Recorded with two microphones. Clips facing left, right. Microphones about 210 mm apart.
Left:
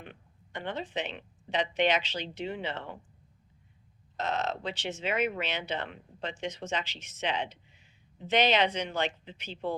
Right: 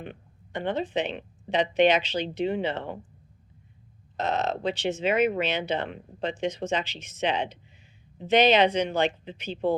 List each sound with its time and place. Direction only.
0.0 s speech: 20° right (ahead or behind)
4.2 s speech: 15° right (ahead or behind)